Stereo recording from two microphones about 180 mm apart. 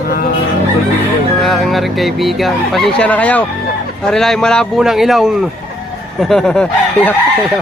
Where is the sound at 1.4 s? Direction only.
Centre (ahead or behind).